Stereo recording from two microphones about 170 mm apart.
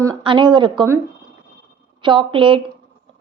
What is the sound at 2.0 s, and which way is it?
Speech, 30° right (ahead or behind).